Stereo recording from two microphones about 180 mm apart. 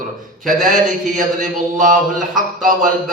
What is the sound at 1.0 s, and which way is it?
Speech, 45° right (ahead or behind).